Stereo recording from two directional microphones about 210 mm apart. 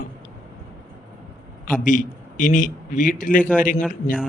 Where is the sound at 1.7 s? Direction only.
40° left (ahead or behind).